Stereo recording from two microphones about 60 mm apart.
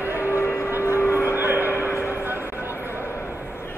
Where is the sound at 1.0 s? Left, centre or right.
Left.